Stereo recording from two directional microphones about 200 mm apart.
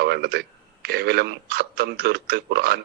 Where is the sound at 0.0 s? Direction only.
55° right (ahead or behind).